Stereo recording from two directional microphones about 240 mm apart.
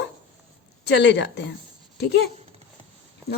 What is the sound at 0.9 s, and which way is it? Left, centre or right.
Speech, left.